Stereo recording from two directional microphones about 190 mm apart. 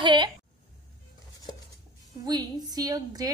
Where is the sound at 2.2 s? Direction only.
20° right (ahead or behind).